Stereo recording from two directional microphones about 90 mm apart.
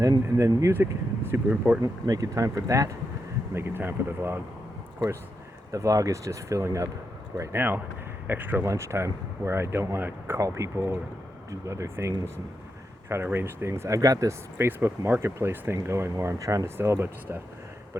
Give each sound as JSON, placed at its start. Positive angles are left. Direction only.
{"t": 0.0, "sound": "speech", "side_deg": -40}
{"t": 0.7, "sound": "speech", "side_deg": -25}
{"t": 1.8, "sound": "speech", "side_deg": -40}
{"t": 5.7, "sound": "speech", "side_deg": -40}
{"t": 8.3, "sound": "speech", "side_deg": -20}
{"t": 8.6, "sound": "speech", "side_deg": -30}
{"t": 14.7, "sound": "speech", "side_deg": -25}